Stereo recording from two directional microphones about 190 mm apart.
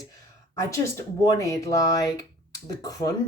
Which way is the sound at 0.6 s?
15° left (ahead or behind).